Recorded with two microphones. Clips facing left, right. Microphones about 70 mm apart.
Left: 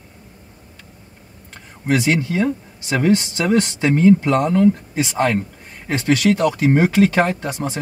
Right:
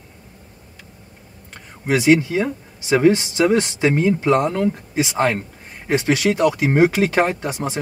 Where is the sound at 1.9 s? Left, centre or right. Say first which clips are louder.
Right 3 dB; centre.